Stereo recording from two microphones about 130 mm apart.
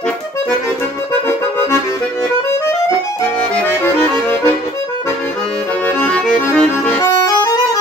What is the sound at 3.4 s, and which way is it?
Accordion, 10° left (ahead or behind).